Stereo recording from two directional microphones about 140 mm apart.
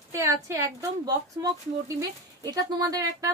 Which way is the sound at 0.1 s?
20° right (ahead or behind).